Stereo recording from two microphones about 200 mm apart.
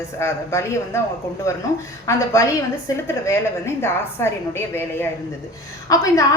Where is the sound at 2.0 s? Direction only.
15° left (ahead or behind).